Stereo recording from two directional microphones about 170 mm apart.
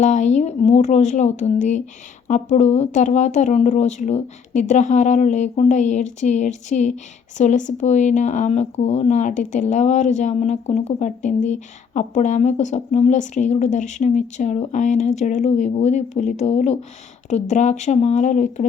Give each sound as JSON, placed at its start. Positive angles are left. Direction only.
{"t": 0.0, "sound": "speech", "side_deg": 45}